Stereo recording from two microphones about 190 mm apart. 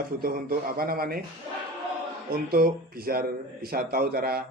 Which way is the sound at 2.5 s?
50° right (ahead or behind).